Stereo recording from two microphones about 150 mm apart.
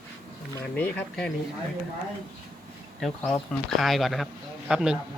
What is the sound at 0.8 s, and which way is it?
Speech, 10° left (ahead or behind).